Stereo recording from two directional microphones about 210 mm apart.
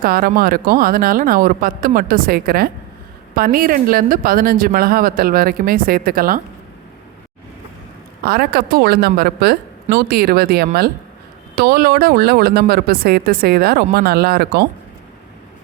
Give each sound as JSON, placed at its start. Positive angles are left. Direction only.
{"t": 0.0, "sound": "speech", "side_deg": -45}
{"t": 8.2, "sound": "speech", "side_deg": -50}